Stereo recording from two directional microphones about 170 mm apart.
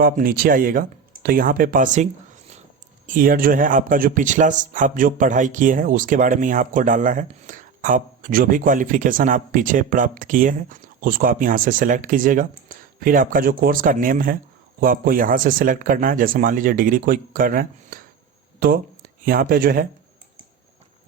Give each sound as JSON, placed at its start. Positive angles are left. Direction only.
{"t": 0.0, "sound": "speech", "side_deg": -55}
{"t": 3.1, "sound": "speech", "side_deg": -55}